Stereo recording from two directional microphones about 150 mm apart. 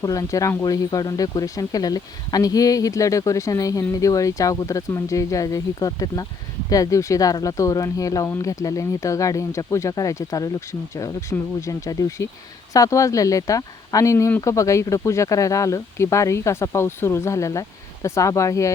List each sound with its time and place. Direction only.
0.0 s speech: 20° left (ahead or behind)